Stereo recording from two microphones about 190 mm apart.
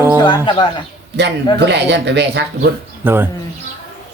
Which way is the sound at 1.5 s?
65° right (ahead or behind).